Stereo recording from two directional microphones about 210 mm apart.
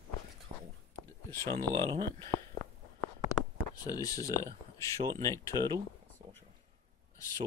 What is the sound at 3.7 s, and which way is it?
Speech, 20° left (ahead or behind).